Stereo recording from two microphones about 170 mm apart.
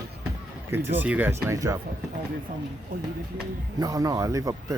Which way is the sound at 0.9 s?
10° right (ahead or behind).